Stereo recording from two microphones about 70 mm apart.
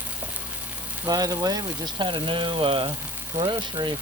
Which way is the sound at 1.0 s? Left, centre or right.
Right.